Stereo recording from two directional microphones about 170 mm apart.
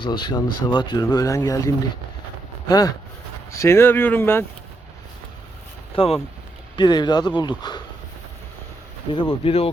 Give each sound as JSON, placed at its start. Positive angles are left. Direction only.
{"t": 0.0, "sound": "speech", "side_deg": 25}
{"t": 5.9, "sound": "speech", "side_deg": 30}
{"t": 9.1, "sound": "speech", "side_deg": 30}